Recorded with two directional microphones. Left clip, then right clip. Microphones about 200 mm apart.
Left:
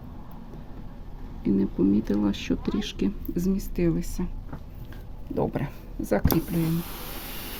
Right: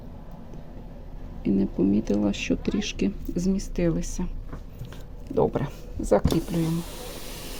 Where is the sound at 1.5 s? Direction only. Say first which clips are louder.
Even; 5° right (ahead or behind).